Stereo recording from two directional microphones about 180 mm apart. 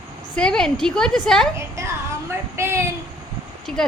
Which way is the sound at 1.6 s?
15° right (ahead or behind).